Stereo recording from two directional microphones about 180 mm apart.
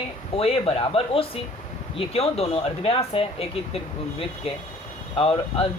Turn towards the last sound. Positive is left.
turn(degrees=30)  # may be behind; listen again after turning